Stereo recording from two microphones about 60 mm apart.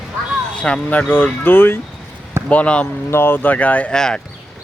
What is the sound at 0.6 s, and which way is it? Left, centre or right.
Speech, left.